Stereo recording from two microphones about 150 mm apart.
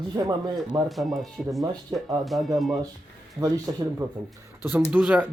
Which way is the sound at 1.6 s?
25° right (ahead or behind).